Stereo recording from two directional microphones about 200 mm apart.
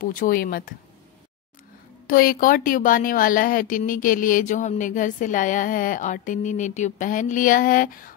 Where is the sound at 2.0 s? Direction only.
45° left (ahead or behind).